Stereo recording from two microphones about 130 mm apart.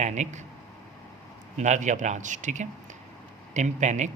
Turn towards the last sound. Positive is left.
turn(degrees=-65)  # may be behind; listen again after turning